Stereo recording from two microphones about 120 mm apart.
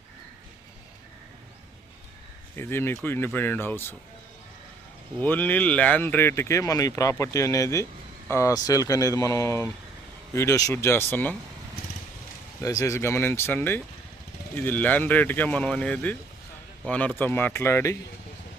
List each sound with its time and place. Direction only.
2.6 s speech: 20° left (ahead or behind)
5.2 s speech: 15° left (ahead or behind)
12.8 s speech: 25° left (ahead or behind)